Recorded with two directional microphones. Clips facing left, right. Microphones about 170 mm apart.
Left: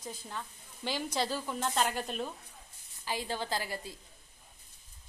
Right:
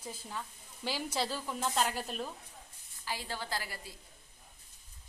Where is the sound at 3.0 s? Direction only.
20° left (ahead or behind).